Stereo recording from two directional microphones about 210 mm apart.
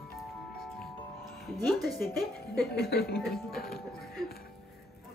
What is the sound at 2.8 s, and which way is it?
Speech, 50° left (ahead or behind).